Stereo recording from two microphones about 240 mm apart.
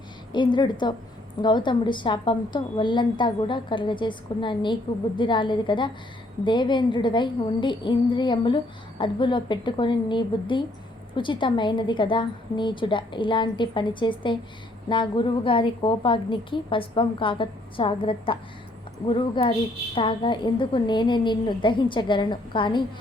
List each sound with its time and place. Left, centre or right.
0.3 s a woman's voice: centre